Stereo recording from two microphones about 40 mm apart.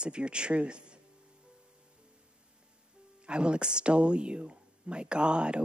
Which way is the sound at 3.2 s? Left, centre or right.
Right.